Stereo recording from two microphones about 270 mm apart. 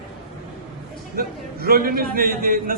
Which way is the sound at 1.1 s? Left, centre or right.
Right.